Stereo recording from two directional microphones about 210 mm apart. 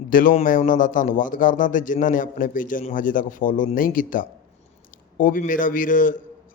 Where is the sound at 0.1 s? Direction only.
40° left (ahead or behind).